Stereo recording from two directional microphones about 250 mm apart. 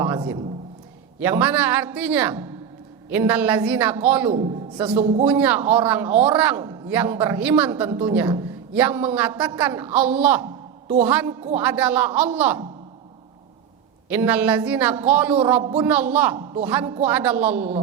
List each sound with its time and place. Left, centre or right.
1.2 s a man's voice: centre
14.1 s a man's voice: centre